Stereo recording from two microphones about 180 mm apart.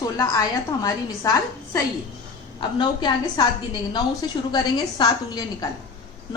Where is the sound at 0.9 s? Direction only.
20° left (ahead or behind).